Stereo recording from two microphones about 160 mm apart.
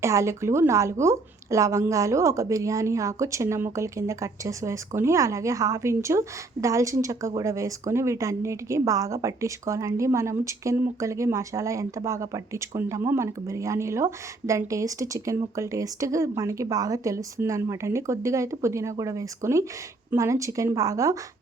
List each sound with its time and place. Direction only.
0.0 s a woman's voice: 20° right (ahead or behind)